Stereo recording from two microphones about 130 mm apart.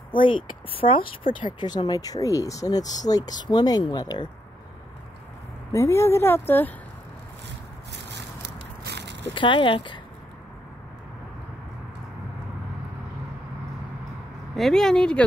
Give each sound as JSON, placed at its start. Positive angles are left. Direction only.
{"t": 0.1, "sound": "speech", "side_deg": 40}
{"t": 5.7, "sound": "speech", "side_deg": 20}
{"t": 9.3, "sound": "speech", "side_deg": 40}
{"t": 14.5, "sound": "speech", "side_deg": 0}